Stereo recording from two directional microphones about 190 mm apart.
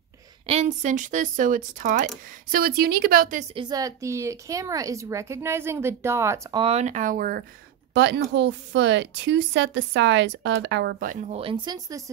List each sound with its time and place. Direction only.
0.5 s speech: 35° right (ahead or behind)
3.5 s speech: 20° right (ahead or behind)
6.6 s speech: 35° right (ahead or behind)
7.9 s speech: 65° right (ahead or behind)
11.0 s speech: 40° right (ahead or behind); by 12.0 s 20° right (ahead or behind)